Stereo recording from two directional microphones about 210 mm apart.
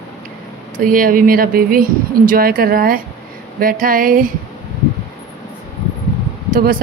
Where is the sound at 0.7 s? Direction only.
40° right (ahead or behind).